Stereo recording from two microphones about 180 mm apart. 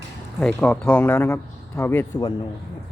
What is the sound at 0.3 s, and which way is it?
Speech, 5° left (ahead or behind).